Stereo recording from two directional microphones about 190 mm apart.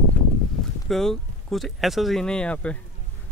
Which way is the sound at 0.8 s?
Centre (ahead or behind).